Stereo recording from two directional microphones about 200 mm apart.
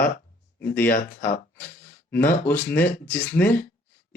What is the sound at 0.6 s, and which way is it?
Speech, 10° left (ahead or behind).